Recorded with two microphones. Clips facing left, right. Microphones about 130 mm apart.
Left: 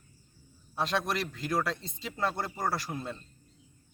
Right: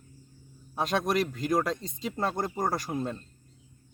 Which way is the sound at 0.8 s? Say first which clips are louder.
Right 4 dB; 45° right (ahead or behind).